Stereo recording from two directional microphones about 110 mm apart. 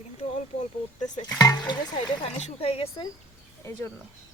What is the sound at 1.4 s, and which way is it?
Speech, 35° left (ahead or behind).